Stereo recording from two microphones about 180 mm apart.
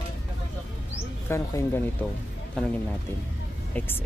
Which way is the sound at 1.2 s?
15° left (ahead or behind).